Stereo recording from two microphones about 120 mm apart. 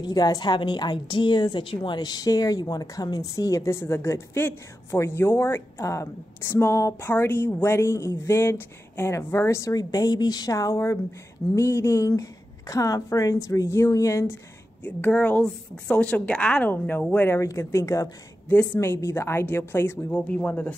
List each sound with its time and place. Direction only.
0.0 s a woman's voice: 35° left (ahead or behind); by 20.7 s 15° left (ahead or behind)